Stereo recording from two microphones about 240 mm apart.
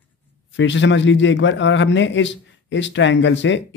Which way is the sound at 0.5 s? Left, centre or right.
Left.